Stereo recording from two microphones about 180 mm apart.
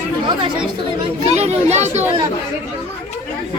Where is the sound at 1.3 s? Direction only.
40° right (ahead or behind).